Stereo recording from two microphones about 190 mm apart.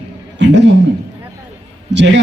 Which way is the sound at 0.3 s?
70° right (ahead or behind).